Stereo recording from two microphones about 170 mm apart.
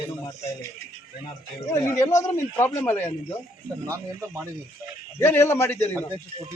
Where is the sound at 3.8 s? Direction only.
15° right (ahead or behind).